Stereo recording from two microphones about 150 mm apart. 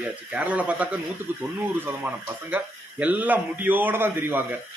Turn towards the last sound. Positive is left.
turn(degrees=-15)  # may be behind; listen again after turning